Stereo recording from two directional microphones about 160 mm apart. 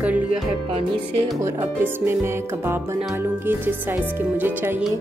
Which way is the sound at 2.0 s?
15° right (ahead or behind).